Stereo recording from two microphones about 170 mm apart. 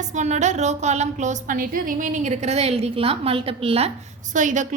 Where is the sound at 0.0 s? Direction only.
45° right (ahead or behind).